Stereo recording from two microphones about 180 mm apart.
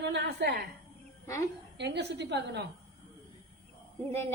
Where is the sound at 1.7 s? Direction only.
70° right (ahead or behind).